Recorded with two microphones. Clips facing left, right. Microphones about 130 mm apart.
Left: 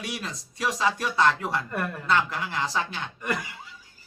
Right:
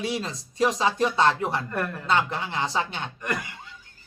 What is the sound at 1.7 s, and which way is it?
Speech, centre (ahead or behind).